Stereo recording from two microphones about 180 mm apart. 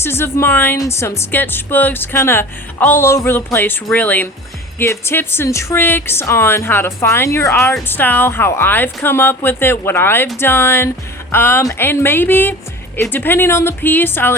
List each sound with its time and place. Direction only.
0.0 s speech: 15° left (ahead or behind)